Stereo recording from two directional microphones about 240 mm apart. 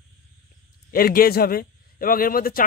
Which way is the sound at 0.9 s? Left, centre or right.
Left.